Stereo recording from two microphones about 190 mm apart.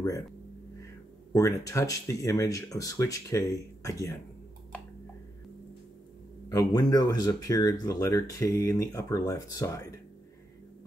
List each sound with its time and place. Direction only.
1.3 s speech: 15° left (ahead or behind)
6.5 s speech: 20° left (ahead or behind)